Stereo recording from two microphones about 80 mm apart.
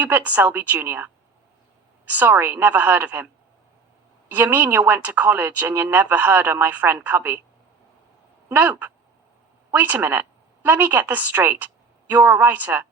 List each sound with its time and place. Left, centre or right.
0.0 s speech: right
4.3 s speech: right
8.4 s a woman's voice: right